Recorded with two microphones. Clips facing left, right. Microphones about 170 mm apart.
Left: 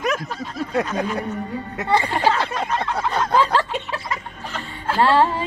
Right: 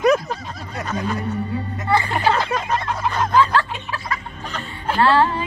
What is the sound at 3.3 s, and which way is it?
Music, 25° left (ahead or behind).